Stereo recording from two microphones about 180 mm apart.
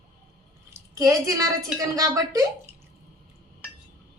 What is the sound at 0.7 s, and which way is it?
A woman's voice, 20° right (ahead or behind).